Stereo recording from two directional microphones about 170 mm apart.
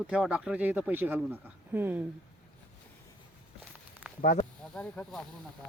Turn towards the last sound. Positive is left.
turn(degrees=5)  # may be behind; listen again after turning